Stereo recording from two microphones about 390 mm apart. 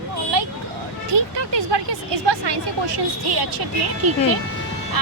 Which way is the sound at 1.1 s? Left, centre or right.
Right.